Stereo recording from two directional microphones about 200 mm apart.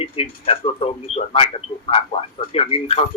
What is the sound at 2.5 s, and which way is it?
Speech, 30° left (ahead or behind).